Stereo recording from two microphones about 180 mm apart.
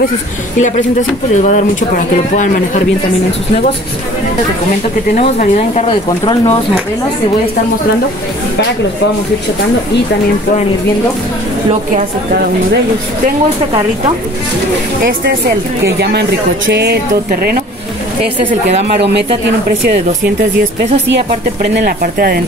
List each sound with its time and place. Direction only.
0.6 s speech: 45° left (ahead or behind)
5.1 s speech: 45° left (ahead or behind)
5.9 s speech: 30° left (ahead or behind)
16.0 s speech: 70° right (ahead or behind)
18.5 s a woman's voice: 40° right (ahead or behind)
21.7 s speech: 55° right (ahead or behind)